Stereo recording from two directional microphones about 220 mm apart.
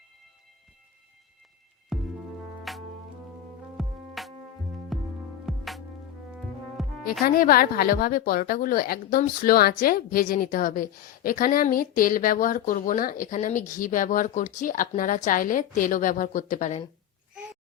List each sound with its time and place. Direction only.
1.9 s music: centre (ahead or behind)
7.3 s a woman's voice: 40° left (ahead or behind)